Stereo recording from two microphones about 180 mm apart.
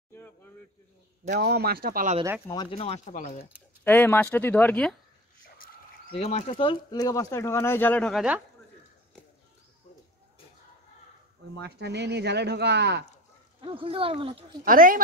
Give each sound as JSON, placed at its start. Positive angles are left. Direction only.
{"t": 0.1, "sound": "a sound", "side_deg": 10}
{"t": 1.4, "sound": "speech", "side_deg": -60}
{"t": 2.4, "sound": "speech", "side_deg": 25}
{"t": 3.8, "sound": "speech", "side_deg": 10}
{"t": 6.1, "sound": "speech", "side_deg": 35}
{"t": 11.6, "sound": "speech", "side_deg": -70}
{"t": 13.6, "sound": "speech", "side_deg": -30}
{"t": 14.6, "sound": "speech", "side_deg": -50}